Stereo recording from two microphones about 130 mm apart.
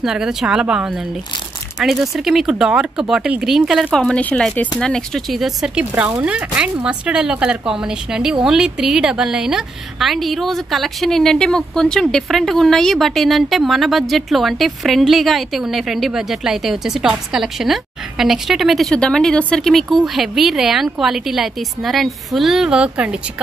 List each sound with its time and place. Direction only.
0.0 s a woman's voice: 5° right (ahead or behind)